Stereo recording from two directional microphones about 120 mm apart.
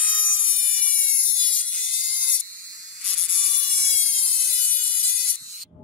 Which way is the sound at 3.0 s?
Centre (ahead or behind).